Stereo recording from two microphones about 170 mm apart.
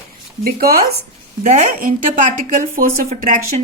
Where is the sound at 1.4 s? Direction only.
50° right (ahead or behind).